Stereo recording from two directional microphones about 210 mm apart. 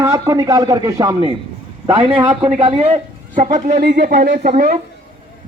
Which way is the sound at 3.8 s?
40° right (ahead or behind).